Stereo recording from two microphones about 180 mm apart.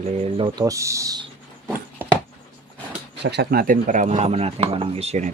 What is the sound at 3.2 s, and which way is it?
Speech, 65° right (ahead or behind).